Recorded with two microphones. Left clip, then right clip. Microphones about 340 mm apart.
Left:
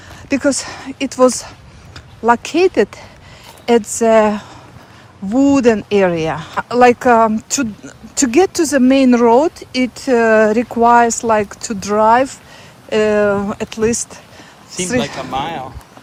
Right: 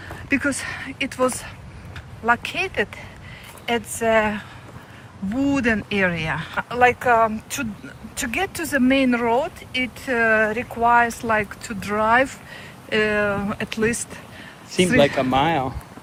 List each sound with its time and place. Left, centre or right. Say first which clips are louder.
0.3 s speech: left 6 dB; centre
14.7 s speech: right 2 dB; right